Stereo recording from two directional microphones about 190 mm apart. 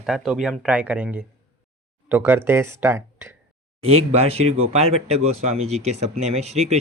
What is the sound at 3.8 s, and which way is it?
Speech, 30° right (ahead or behind).